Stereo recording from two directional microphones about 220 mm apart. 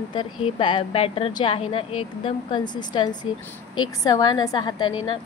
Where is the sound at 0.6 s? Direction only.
25° left (ahead or behind).